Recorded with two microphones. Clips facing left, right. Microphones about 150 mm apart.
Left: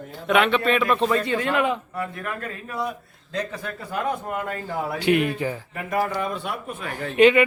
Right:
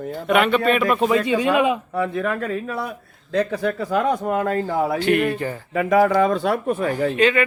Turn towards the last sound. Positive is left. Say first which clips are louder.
# left 3 dB
turn(degrees=15)  # may be behind; listen again after turning